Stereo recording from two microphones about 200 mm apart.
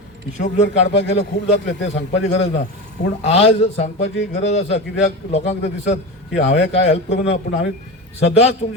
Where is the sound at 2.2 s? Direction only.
30° left (ahead or behind).